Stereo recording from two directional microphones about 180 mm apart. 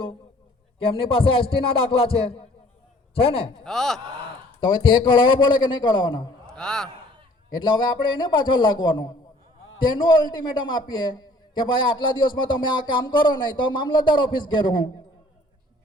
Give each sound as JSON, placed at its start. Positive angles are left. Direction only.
{"t": 0.8, "sound": "speech", "side_deg": 30}
{"t": 3.2, "sound": "speech", "side_deg": 30}
{"t": 3.6, "sound": "speech", "side_deg": 0}
{"t": 4.6, "sound": "a man's voice", "side_deg": 25}
{"t": 6.5, "sound": "a man's voice", "side_deg": 5}
{"t": 7.5, "sound": "a man's voice", "side_deg": 25}